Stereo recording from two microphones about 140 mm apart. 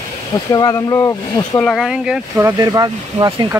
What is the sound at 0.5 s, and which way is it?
Speech, 25° left (ahead or behind).